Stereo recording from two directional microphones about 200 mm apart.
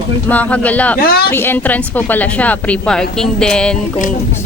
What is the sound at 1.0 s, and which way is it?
Speech, 50° left (ahead or behind).